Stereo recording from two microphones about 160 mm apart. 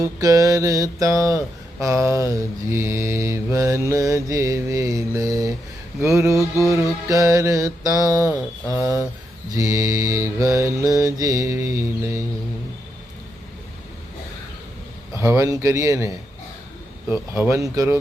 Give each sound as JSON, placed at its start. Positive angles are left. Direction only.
{"t": 0.0, "sound": "mantra", "side_deg": -20}
{"t": 6.0, "sound": "speech", "side_deg": -15}
{"t": 7.1, "sound": "mantra", "side_deg": -20}
{"t": 15.2, "sound": "mantra", "side_deg": -15}
{"t": 17.1, "sound": "speech", "side_deg": -15}